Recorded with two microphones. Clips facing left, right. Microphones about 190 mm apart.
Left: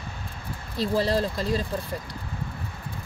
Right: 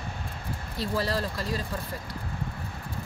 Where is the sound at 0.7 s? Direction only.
25° left (ahead or behind).